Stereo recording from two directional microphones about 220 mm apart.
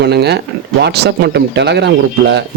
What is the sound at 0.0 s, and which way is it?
Speech, 50° right (ahead or behind).